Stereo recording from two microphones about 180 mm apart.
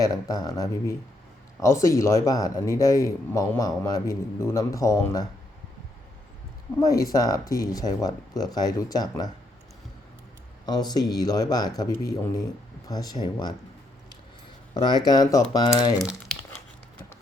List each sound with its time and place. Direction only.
0.0 s a man's voice: 20° left (ahead or behind)
6.7 s speech: 20° left (ahead or behind)
10.7 s speech: 20° left (ahead or behind)
12.9 s speech: 20° left (ahead or behind)
14.7 s speech: 25° left (ahead or behind)
16.0 s crumpling: centre (ahead or behind)